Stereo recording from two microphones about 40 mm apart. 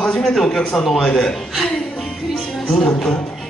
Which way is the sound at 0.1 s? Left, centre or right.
Centre.